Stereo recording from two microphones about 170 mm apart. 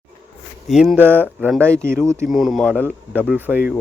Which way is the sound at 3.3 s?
10° right (ahead or behind).